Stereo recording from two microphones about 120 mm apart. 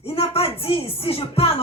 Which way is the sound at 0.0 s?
50° left (ahead or behind).